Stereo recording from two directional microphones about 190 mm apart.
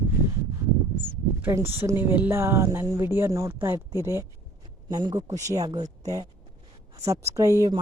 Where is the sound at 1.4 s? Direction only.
10° right (ahead or behind).